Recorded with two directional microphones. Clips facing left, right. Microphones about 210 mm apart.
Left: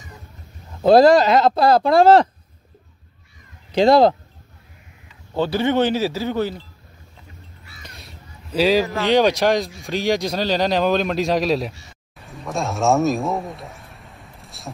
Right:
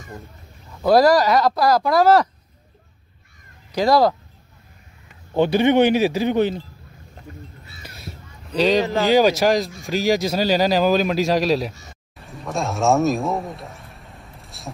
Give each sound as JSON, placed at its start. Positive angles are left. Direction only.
{"t": 0.8, "sound": "speech", "side_deg": 25}
{"t": 3.7, "sound": "speech", "side_deg": 25}
{"t": 5.3, "sound": "speech", "side_deg": -15}
{"t": 7.8, "sound": "a sound", "side_deg": 0}
{"t": 9.0, "sound": "speech", "side_deg": -5}
{"t": 12.2, "sound": "a sound", "side_deg": 0}